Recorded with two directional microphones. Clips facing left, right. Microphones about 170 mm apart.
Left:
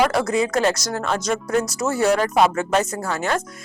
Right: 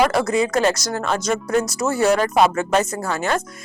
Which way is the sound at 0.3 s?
15° right (ahead or behind).